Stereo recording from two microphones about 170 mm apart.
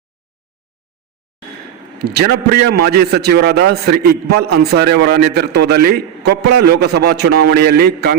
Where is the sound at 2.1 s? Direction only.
70° right (ahead or behind).